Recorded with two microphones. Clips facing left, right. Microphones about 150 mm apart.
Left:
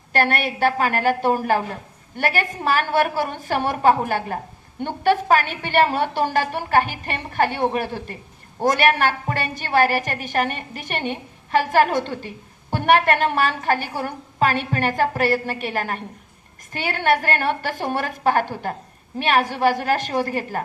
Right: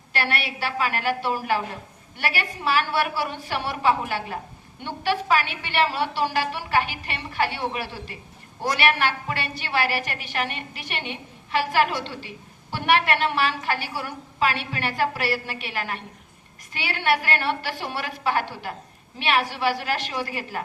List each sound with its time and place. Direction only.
0.1 s a woman's voice: 50° left (ahead or behind)